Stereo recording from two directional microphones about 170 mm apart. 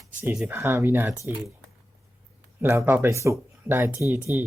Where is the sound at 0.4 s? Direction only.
15° right (ahead or behind).